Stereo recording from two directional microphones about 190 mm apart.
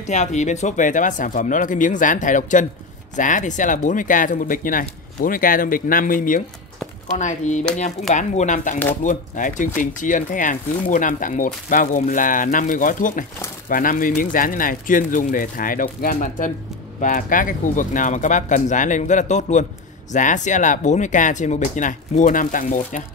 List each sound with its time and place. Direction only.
0.0 s speech: 40° left (ahead or behind)